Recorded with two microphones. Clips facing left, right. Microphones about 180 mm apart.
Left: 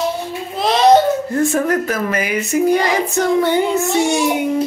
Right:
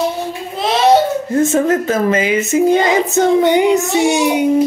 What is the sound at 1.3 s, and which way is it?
Speech, 20° right (ahead or behind).